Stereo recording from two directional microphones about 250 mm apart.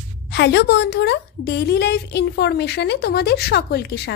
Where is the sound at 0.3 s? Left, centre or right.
Left.